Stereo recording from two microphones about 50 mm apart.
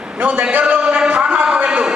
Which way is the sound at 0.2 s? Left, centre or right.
Right.